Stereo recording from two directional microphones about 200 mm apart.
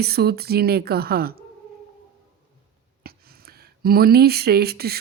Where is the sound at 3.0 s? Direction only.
50° right (ahead or behind).